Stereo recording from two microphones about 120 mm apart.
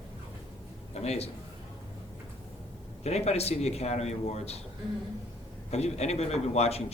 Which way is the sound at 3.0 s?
65° left (ahead or behind).